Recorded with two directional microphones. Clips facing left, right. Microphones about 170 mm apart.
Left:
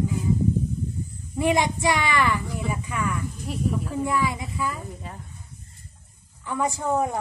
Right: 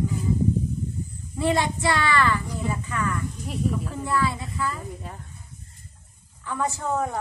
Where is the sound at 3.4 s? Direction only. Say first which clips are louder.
Even; centre (ahead or behind).